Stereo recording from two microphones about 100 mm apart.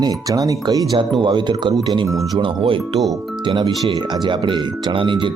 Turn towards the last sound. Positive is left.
turn(degrees=-55)  # may be behind; listen again after turning